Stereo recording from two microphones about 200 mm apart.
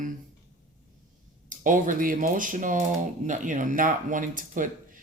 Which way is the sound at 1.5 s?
40° right (ahead or behind).